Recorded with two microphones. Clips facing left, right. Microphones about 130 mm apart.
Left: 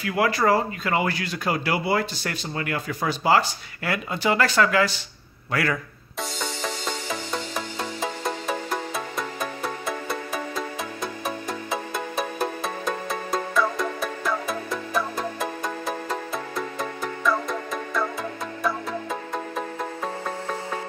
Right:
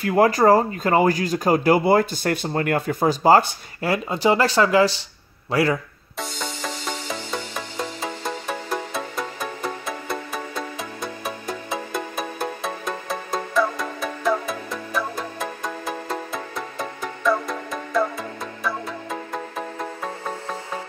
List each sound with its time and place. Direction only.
0.0 s speech: 40° right (ahead or behind)
3.8 s a man's voice: 35° right (ahead or behind)
8.0 s music: centre (ahead or behind)